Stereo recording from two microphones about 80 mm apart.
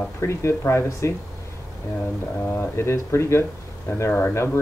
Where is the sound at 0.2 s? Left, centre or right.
Left.